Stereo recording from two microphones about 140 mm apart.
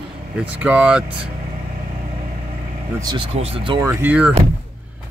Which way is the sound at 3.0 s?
30° right (ahead or behind).